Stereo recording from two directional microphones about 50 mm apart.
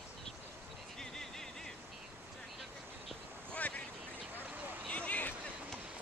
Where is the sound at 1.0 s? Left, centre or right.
Centre.